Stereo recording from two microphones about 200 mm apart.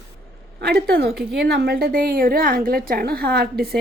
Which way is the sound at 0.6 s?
55° right (ahead or behind).